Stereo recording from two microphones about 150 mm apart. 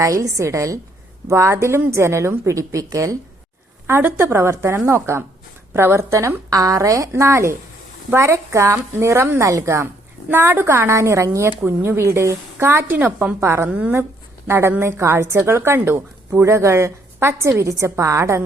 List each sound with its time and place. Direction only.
0.0 s a woman's voice: 20° right (ahead or behind)